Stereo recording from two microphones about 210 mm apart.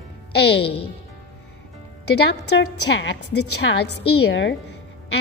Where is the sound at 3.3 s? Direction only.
55° left (ahead or behind).